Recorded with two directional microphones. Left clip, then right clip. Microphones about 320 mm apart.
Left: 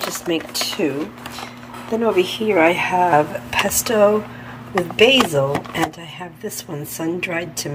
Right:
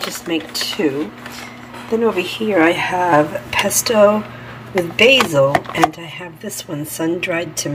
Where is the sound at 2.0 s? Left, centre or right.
Centre.